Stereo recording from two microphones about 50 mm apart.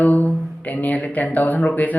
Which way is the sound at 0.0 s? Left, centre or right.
Left.